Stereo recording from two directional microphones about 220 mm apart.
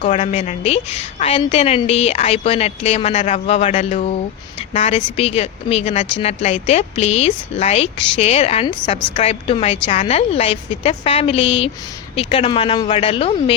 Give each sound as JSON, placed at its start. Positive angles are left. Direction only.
{"t": 0.0, "sound": "a woman's voice", "side_deg": 35}